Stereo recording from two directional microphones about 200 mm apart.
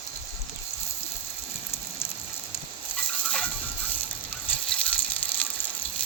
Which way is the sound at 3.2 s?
5° left (ahead or behind).